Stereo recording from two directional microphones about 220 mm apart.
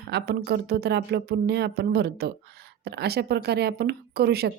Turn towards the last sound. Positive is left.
turn(degrees=-45)  # may be behind; listen again after turning